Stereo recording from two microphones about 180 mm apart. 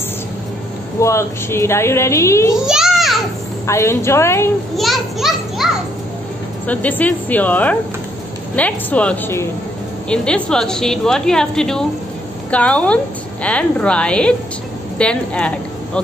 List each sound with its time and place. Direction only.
1.0 s a woman's voice: 15° left (ahead or behind)
2.6 s a sound: 5° right (ahead or behind)
3.6 s a woman's voice: 15° left (ahead or behind)
4.7 s children playing: centre (ahead or behind)
6.7 s a woman's voice: 10° left (ahead or behind)